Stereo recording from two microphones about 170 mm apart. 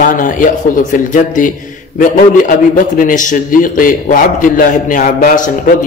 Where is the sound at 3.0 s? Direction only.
50° left (ahead or behind).